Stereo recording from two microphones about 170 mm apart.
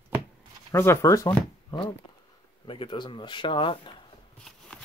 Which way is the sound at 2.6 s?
30° left (ahead or behind).